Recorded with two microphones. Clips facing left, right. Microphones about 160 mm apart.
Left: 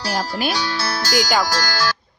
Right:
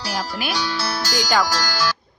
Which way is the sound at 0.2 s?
35° left (ahead or behind).